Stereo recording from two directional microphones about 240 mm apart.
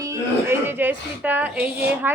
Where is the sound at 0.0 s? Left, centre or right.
Centre.